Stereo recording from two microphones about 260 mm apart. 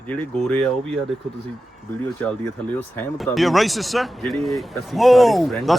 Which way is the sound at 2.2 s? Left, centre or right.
Centre.